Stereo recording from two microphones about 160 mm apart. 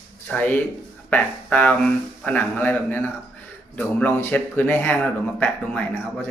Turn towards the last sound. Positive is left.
turn(degrees=5)  # may be behind; listen again after turning